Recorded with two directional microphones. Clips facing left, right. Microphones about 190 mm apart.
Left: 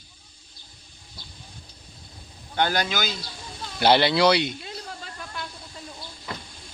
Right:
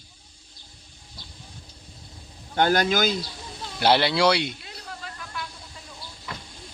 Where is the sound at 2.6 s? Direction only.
45° right (ahead or behind).